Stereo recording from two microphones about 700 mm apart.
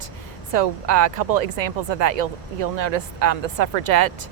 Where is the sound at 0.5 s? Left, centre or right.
Right.